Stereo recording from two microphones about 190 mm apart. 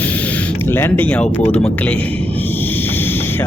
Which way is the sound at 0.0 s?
10° left (ahead or behind).